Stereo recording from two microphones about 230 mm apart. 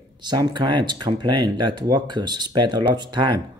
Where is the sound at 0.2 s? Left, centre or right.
Centre.